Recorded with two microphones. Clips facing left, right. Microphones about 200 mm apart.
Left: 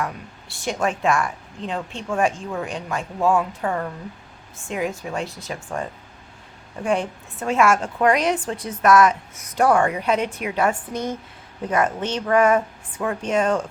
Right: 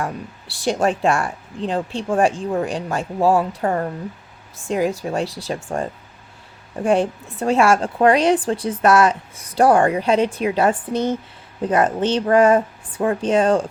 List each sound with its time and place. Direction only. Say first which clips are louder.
0.0 s a woman's voice: right 2 dB; 35° right (ahead or behind)